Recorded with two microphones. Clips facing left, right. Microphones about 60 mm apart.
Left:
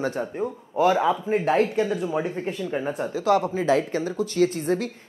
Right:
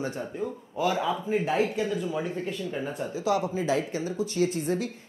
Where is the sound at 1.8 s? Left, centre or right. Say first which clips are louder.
Left 4 dB; left.